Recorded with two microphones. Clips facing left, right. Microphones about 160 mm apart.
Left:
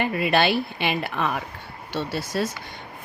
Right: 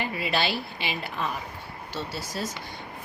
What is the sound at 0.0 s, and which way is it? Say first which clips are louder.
A woman's voice: left 7 dB; 60° left (ahead or behind).